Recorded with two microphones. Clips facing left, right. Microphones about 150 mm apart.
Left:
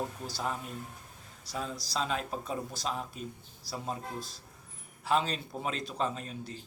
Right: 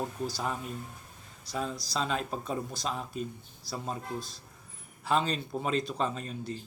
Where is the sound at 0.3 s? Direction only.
Centre (ahead or behind).